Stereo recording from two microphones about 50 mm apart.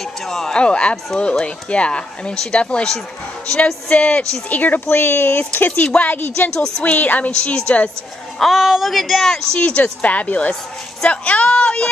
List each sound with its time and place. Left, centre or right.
0.3 s speech: centre
0.6 s a woman's voice: left
4.5 s a woman's voice: left
6.5 s speech: centre
6.8 s a woman's voice: left
8.4 s speech: centre
9.3 s a woman's voice: centre